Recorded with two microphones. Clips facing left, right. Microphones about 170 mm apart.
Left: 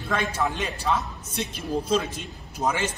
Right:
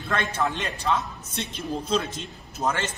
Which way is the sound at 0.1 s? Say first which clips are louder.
Even; 10° left (ahead or behind).